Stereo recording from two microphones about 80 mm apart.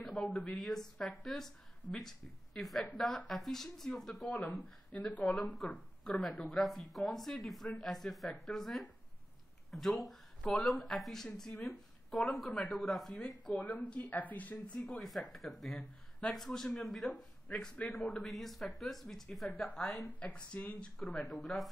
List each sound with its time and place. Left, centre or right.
0.0 s a woman's voice: centre
13.6 s speech: centre
14.8 s a woman's voice: centre
19.5 s speech: centre
19.8 s a woman's voice: centre
20.2 s speech: centre
21.2 s a woman's voice: centre